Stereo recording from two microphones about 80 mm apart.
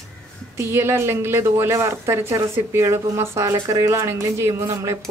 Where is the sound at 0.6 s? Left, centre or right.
Right.